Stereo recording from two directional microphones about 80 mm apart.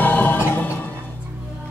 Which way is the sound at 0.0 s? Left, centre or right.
Left.